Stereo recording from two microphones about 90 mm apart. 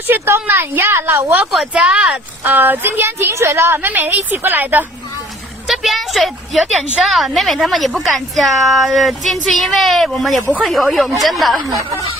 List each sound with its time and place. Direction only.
0.1 s a woman's voice: 25° right (ahead or behind)
1.5 s speech: 5° right (ahead or behind)
2.4 s a woman's voice: 20° right (ahead or behind)
5.6 s a woman's voice: centre (ahead or behind)
11.6 s speech: 35° right (ahead or behind)